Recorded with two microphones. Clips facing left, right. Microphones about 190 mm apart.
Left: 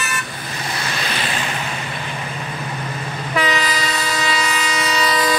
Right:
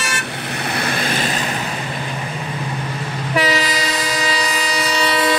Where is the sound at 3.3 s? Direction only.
35° right (ahead or behind).